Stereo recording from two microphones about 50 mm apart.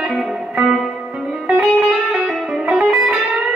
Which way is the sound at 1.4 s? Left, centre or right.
Centre.